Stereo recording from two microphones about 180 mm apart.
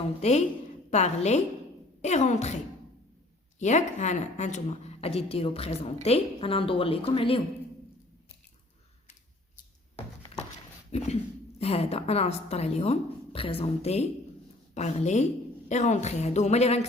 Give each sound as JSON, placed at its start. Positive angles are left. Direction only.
{"t": 0.2, "sound": "a woman's voice", "side_deg": 40}
{"t": 3.6, "sound": "a woman's voice", "side_deg": 40}
{"t": 10.9, "sound": "a woman's voice", "side_deg": 35}